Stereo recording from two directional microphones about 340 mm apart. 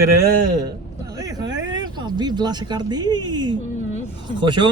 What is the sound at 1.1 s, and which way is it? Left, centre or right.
Vehicle, centre.